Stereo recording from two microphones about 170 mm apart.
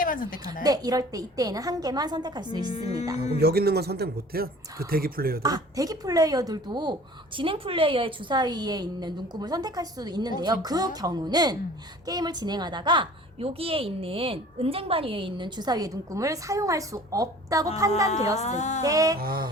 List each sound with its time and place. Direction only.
0.0 s speech: 55° left (ahead or behind)
0.6 s a woman's voice: 20° right (ahead or behind)
3.4 s speech: 65° right (ahead or behind)
5.4 s a woman's voice: 20° right (ahead or behind)
18.3 s speech: 40° left (ahead or behind)
18.8 s a woman's voice: 20° right (ahead or behind)
19.2 s speech: 60° right (ahead or behind)